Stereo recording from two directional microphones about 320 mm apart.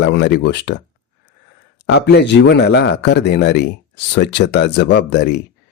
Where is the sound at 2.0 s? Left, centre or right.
Left.